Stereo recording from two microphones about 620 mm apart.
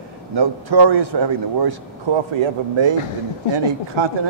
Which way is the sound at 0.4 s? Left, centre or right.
Right.